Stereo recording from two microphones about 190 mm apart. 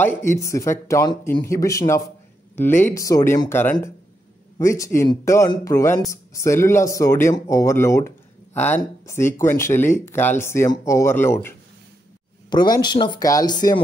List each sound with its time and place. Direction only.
0.0 s speech: 10° left (ahead or behind)